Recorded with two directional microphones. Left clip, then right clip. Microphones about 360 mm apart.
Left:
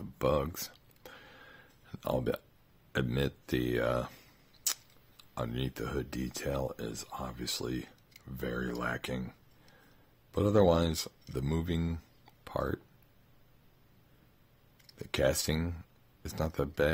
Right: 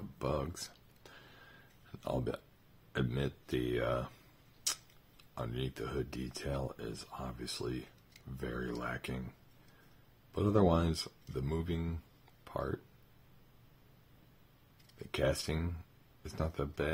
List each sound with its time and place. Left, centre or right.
0.2 s a sound: centre
2.9 s speech: centre
10.3 s speech: centre
15.0 s speech: left